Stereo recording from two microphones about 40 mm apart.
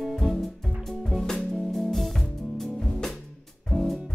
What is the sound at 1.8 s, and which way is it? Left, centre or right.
Music, centre.